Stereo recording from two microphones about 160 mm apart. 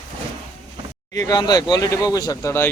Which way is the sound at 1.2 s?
25° left (ahead or behind).